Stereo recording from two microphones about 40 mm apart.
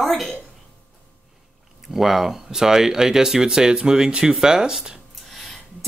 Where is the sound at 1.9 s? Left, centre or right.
Centre.